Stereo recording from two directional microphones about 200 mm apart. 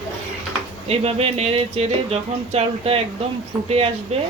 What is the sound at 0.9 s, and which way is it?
Speech, 30° right (ahead or behind).